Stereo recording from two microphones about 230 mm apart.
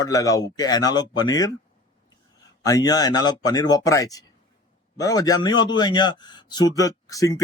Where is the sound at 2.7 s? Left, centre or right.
Centre.